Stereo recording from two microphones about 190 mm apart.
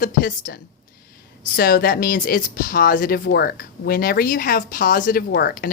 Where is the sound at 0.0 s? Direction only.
50° left (ahead or behind).